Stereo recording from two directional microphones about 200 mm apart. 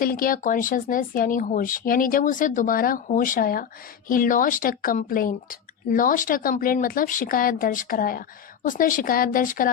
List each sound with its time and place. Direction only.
0.0 s speech: 45° left (ahead or behind)